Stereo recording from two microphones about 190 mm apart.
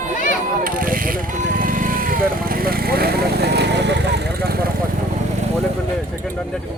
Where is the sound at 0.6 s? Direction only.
45° right (ahead or behind).